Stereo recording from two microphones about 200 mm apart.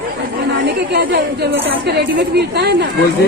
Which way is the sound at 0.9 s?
55° right (ahead or behind).